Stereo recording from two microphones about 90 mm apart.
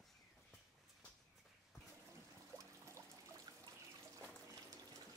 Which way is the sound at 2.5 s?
35° right (ahead or behind).